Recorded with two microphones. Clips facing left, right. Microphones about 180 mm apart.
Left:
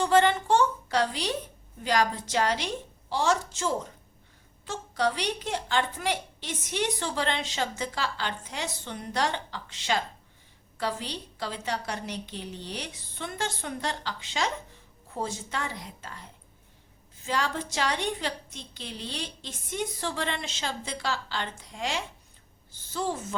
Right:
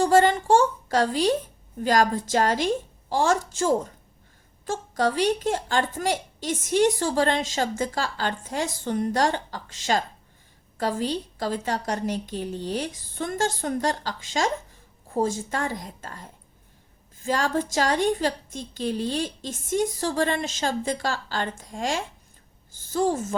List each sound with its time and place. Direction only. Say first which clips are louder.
0.0 s a woman's voice: right 4 dB; 40° right (ahead or behind)